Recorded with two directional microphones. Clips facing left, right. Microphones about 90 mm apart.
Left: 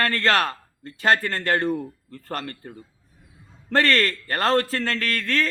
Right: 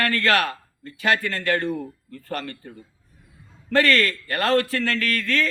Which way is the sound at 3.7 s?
35° left (ahead or behind).